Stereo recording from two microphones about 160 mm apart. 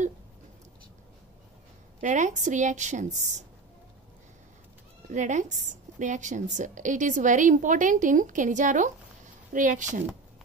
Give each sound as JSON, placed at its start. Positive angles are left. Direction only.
{"t": 2.0, "sound": "a woman's voice", "side_deg": -50}
{"t": 5.1, "sound": "a woman's voice", "side_deg": -50}